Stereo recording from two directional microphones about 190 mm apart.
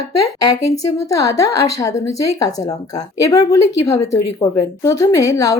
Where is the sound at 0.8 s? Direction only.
15° left (ahead or behind).